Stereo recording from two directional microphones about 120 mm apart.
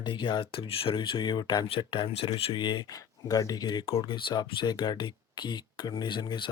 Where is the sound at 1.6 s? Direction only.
45° left (ahead or behind).